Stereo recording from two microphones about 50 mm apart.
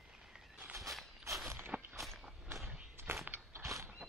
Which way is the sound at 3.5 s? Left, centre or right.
Right.